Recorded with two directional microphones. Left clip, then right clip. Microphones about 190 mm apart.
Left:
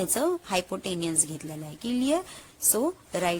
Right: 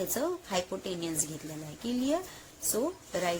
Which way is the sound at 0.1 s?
30° left (ahead or behind).